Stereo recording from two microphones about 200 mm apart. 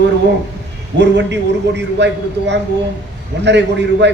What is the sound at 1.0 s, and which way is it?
A man's voice, 60° right (ahead or behind).